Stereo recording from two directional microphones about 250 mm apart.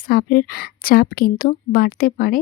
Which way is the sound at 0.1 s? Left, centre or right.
Left.